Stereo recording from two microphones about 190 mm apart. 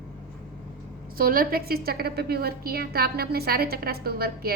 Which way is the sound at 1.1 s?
50° right (ahead or behind).